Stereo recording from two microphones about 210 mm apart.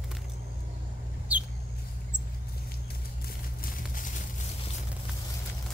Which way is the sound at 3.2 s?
40° left (ahead or behind).